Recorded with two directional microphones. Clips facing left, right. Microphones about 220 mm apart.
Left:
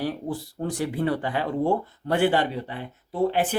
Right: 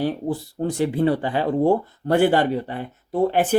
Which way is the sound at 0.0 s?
25° right (ahead or behind).